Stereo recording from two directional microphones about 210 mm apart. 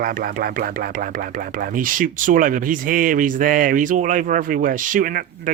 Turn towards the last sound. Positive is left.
turn(degrees=-40)  # may be behind; listen again after turning